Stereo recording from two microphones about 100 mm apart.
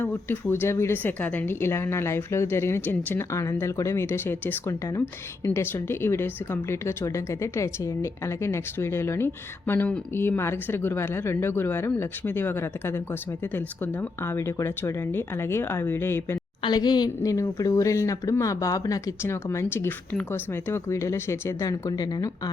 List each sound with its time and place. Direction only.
0.0 s speech: 20° left (ahead or behind)
16.6 s a woman's voice: 45° left (ahead or behind)